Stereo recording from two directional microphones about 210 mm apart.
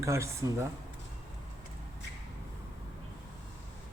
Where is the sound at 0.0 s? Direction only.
15° right (ahead or behind).